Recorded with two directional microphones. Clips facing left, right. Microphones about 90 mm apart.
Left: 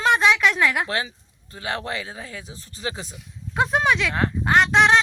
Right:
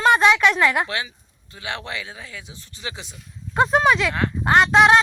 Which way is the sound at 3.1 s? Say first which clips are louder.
Right 3 dB; centre (ahead or behind).